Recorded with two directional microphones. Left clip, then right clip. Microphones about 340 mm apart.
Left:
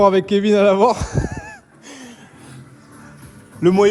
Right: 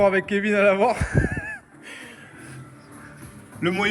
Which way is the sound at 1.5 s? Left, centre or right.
Centre.